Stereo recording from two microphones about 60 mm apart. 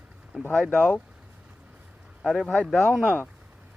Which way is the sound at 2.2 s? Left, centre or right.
Centre.